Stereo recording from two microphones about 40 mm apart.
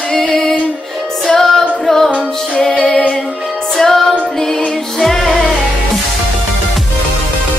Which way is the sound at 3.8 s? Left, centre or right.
Centre.